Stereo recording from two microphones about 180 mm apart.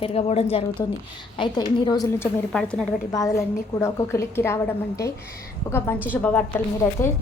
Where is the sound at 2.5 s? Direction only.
5° left (ahead or behind).